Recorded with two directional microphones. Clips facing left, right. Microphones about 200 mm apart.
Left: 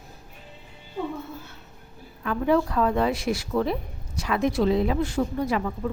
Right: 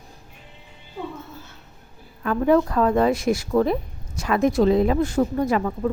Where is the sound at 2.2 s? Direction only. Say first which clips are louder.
Right 4 dB; 45° right (ahead or behind).